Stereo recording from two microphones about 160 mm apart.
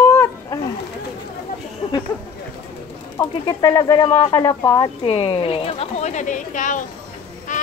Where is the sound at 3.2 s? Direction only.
25° left (ahead or behind).